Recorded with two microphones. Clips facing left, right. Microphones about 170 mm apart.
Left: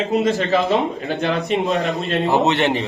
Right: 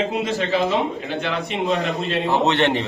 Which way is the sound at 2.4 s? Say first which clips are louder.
Left 1 dB; 5° left (ahead or behind).